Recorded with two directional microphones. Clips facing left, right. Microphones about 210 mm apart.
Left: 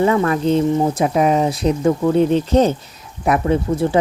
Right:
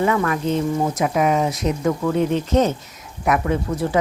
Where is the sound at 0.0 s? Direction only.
30° left (ahead or behind).